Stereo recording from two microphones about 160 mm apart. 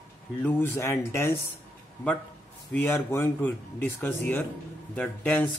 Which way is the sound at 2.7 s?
15° left (ahead or behind).